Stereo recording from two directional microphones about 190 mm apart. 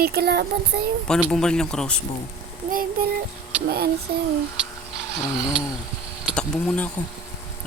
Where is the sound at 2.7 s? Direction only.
50° right (ahead or behind).